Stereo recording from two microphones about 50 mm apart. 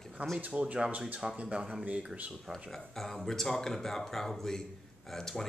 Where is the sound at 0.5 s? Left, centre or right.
Right.